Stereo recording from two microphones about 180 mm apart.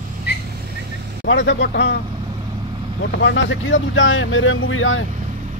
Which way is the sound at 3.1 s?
85° left.